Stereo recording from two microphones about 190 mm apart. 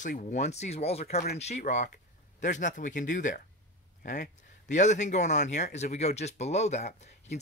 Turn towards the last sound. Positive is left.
turn(degrees=35)  # may be behind; listen again after turning